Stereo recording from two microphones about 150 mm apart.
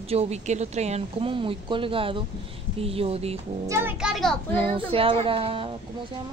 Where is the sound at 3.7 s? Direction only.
15° right (ahead or behind).